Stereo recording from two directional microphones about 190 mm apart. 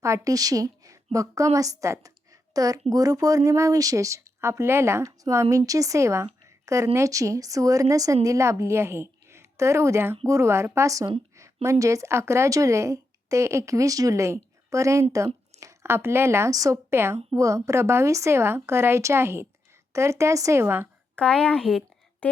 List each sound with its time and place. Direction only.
0.0 s a woman's voice: 15° right (ahead or behind)
21.2 s a woman's voice: 5° left (ahead or behind)